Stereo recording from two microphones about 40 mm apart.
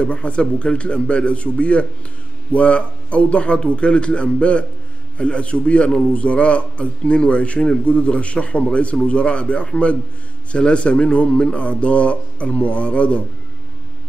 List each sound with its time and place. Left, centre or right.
0.0 s a man's voice: left